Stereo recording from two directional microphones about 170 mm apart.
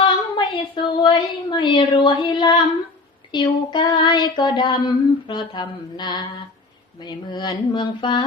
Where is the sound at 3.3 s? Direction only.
30° left (ahead or behind).